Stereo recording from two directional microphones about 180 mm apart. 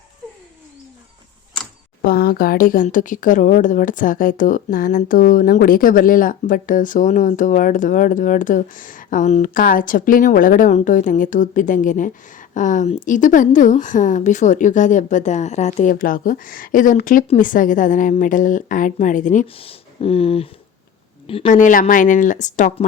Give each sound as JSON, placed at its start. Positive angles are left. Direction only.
{"t": 2.0, "sound": "a woman's voice", "side_deg": 55}
{"t": 19.5, "sound": "a sound", "side_deg": 30}
{"t": 21.2, "sound": "a woman's voice", "side_deg": 35}